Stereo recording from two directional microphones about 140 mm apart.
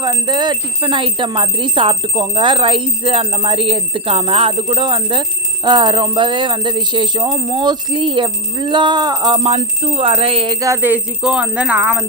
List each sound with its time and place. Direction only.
0.0 s speech: 35° right (ahead or behind)
9.5 s jingle bell: 45° right (ahead or behind)
10.6 s speech: 15° right (ahead or behind)